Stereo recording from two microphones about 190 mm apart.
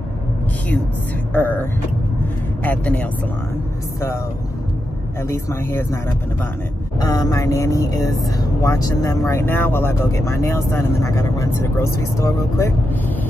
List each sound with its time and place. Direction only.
1.3 s speech: 10° left (ahead or behind)
5.3 s speech: 15° left (ahead or behind)
7.0 s speech: 20° left (ahead or behind)